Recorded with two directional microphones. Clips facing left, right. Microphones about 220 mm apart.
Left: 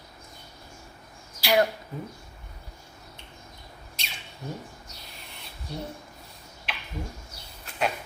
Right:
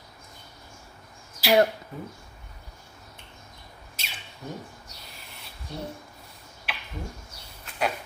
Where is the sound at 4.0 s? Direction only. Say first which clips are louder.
Even; 5° right (ahead or behind).